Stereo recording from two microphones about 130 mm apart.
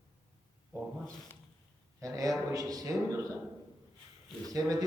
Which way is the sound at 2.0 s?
25° right (ahead or behind).